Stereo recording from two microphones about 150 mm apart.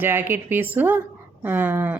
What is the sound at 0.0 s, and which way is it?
Speech, 15° right (ahead or behind).